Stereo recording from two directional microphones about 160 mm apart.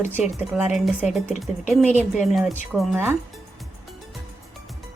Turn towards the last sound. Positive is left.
turn(degrees=-10)  # may be behind; listen again after turning